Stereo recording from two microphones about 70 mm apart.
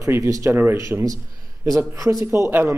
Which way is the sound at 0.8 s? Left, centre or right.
Right.